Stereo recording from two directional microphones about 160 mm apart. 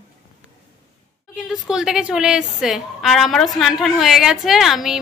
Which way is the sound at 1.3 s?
5° right (ahead or behind).